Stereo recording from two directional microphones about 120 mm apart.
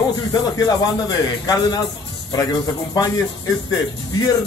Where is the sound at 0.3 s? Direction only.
35° left (ahead or behind).